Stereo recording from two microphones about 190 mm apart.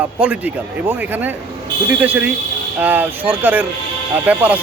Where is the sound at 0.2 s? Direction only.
10° right (ahead or behind).